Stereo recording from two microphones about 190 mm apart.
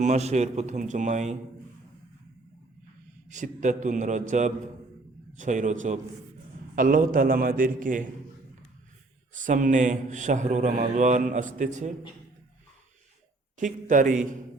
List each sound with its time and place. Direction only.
0.0 s a man's voice: 35° right (ahead or behind)
3.2 s a man's voice: 40° right (ahead or behind)
9.3 s a man's voice: 40° right (ahead or behind)
13.8 s a man's voice: 45° right (ahead or behind)